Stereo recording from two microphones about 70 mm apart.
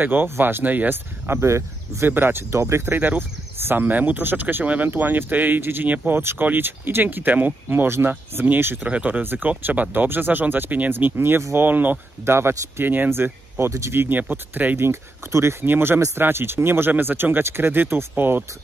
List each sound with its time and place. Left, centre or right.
0.0 s speech: right
3.0 s speech: right
12.3 s speech: right
14.3 s speech: right
14.8 s speech: right